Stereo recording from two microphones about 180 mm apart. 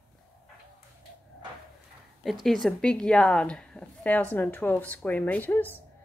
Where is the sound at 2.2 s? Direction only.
Centre (ahead or behind).